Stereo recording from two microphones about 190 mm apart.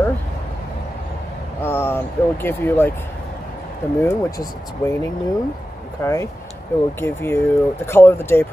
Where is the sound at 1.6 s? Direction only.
10° left (ahead or behind).